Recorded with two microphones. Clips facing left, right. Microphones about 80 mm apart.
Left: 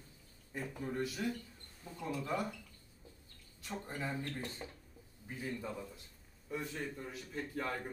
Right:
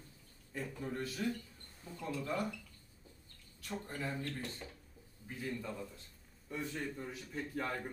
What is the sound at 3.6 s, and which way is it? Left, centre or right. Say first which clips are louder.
A man's voice: even; centre.